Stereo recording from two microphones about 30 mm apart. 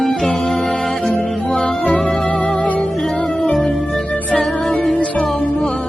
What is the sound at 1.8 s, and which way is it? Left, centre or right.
Music, left.